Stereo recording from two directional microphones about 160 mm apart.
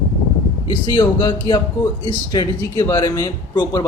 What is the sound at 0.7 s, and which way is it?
Speech, 30° left (ahead or behind).